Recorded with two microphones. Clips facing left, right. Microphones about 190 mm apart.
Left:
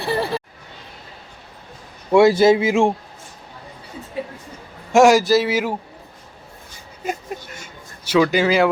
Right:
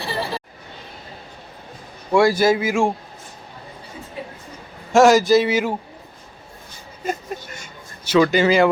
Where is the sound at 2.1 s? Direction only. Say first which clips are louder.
Left 3 dB; 25° left (ahead or behind).